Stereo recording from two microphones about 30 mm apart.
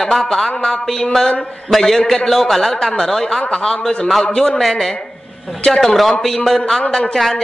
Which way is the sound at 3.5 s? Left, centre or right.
Left.